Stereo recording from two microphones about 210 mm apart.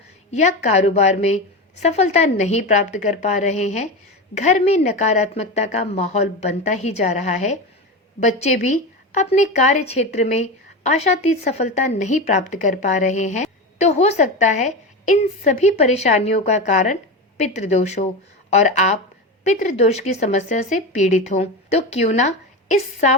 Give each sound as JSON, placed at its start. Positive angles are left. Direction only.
{"t": 0.3, "sound": "speech", "side_deg": 35}
{"t": 9.1, "sound": "speech", "side_deg": 35}